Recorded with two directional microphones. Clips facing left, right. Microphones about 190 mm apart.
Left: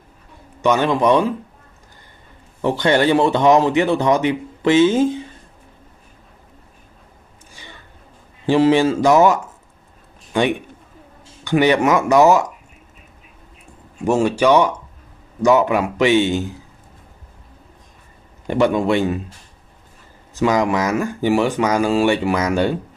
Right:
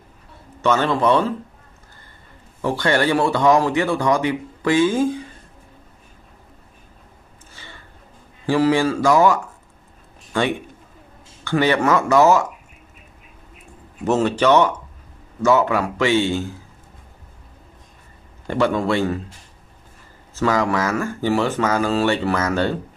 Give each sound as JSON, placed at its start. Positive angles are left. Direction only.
{"t": 0.6, "sound": "speech", "side_deg": 15}
{"t": 2.6, "sound": "speech", "side_deg": 20}
{"t": 8.5, "sound": "speech", "side_deg": 20}
{"t": 14.0, "sound": "speech", "side_deg": 10}
{"t": 18.5, "sound": "speech", "side_deg": 15}
{"t": 20.3, "sound": "speech", "side_deg": 15}